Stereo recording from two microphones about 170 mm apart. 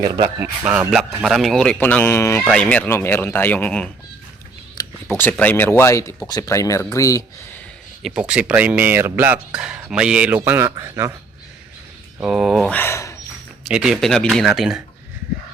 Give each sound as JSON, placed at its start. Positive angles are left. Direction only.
{"t": 0.0, "sound": "a man's voice", "side_deg": -20}
{"t": 8.0, "sound": "speech", "side_deg": -5}
{"t": 12.2, "sound": "a man's voice", "side_deg": -5}
{"t": 12.7, "sound": "speech", "side_deg": 15}
{"t": 13.7, "sound": "a man's voice", "side_deg": 0}